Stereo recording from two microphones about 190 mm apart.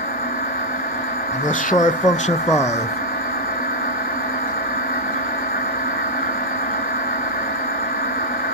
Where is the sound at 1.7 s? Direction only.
40° left (ahead or behind).